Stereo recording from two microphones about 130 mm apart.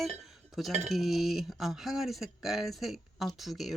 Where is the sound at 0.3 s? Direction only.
Centre (ahead or behind).